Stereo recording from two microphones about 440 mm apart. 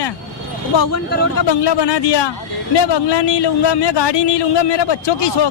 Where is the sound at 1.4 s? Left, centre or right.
Left.